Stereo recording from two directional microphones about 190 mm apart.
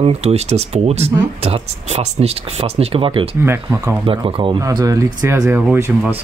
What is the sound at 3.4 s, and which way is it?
Speech, 10° right (ahead or behind).